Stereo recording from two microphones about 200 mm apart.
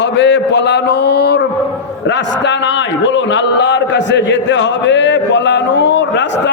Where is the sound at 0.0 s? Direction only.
60° left (ahead or behind).